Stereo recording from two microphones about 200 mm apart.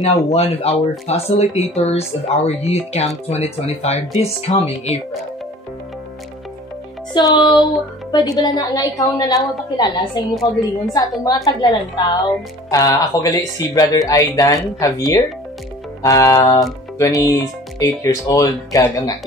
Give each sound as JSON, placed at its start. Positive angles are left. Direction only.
{"t": 0.0, "sound": "speech", "side_deg": 30}
{"t": 7.2, "sound": "a woman's voice", "side_deg": 20}
{"t": 11.4, "sound": "speech", "side_deg": 15}